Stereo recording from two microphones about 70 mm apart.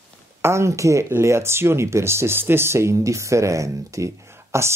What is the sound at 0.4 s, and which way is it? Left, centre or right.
Speech, right.